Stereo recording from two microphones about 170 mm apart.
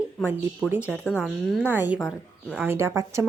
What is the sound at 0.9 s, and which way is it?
Speech, 10° left (ahead or behind).